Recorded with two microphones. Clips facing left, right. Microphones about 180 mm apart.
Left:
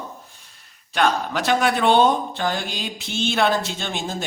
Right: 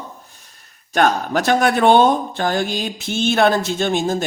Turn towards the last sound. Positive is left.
turn(degrees=-45)  # may be behind; listen again after turning